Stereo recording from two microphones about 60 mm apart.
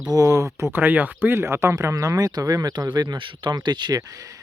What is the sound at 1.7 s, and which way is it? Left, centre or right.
Speech, right.